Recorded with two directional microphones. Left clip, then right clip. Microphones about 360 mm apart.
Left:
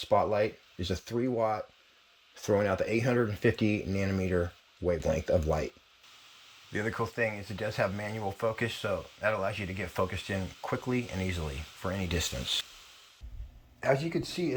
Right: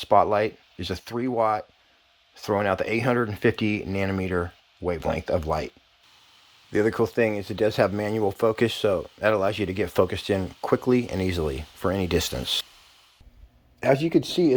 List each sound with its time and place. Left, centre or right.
0.0 s speech: centre
6.7 s speech: centre
13.8 s speech: right